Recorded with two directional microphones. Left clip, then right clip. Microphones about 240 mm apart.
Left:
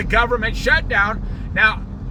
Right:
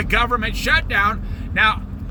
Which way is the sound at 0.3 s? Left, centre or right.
Centre.